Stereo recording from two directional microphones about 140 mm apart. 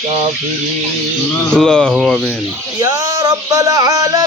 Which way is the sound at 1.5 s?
5° left (ahead or behind).